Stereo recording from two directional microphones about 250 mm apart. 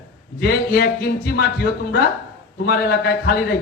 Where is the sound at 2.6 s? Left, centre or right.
Left.